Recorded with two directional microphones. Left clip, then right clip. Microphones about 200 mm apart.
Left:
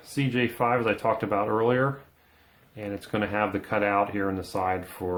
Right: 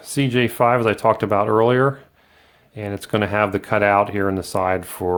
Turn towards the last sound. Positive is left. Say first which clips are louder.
# right 8 dB
turn(degrees=-45)  # may be behind; listen again after turning